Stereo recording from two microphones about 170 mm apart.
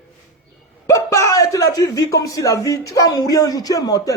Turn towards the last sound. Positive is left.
turn(degrees=20)  # may be behind; listen again after turning